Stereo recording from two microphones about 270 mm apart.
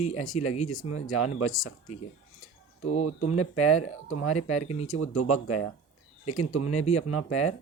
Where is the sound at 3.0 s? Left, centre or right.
Left.